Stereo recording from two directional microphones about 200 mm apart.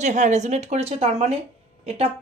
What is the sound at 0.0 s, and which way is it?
Speech, 35° right (ahead or behind).